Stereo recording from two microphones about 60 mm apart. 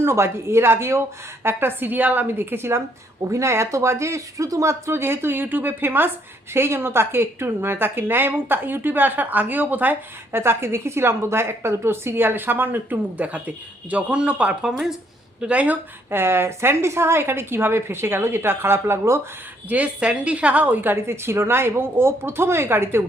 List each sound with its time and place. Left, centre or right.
0.0 s a woman's voice: right; by 14.5 s centre
14.6 s speech: centre
15.4 s speech: right
16.0 s a woman's voice: right
19.6 s speech: right